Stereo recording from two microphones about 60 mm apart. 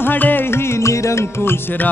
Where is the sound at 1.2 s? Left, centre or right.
Left.